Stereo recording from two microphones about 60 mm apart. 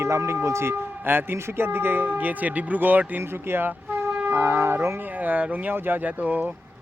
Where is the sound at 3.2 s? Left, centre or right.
Right.